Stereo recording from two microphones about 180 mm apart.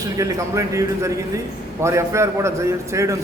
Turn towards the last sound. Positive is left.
turn(degrees=-15)  # may be behind; listen again after turning